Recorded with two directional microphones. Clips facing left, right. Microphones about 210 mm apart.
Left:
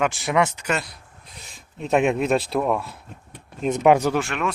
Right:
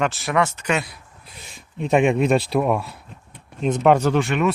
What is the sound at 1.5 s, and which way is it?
Speech, centre (ahead or behind).